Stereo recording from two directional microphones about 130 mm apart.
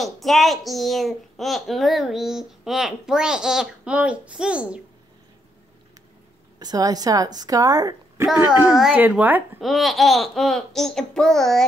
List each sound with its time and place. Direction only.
0.0 s a child's voice: centre (ahead or behind)
6.6 s a woman's voice: 30° right (ahead or behind)
8.9 s speech: 10° right (ahead or behind)
9.6 s a child's voice: centre (ahead or behind)